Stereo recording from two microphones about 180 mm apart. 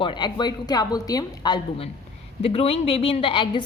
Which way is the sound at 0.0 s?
25° left (ahead or behind).